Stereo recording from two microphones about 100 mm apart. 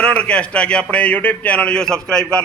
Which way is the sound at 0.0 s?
10° left (ahead or behind).